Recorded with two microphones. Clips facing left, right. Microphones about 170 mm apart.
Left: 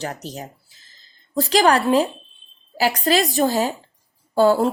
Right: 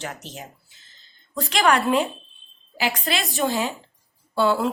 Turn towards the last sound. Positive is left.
turn(degrees=40)  # may be behind; listen again after turning